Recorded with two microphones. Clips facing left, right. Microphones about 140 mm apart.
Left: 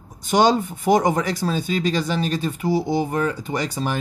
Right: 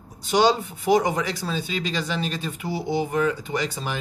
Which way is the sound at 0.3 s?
45° left (ahead or behind).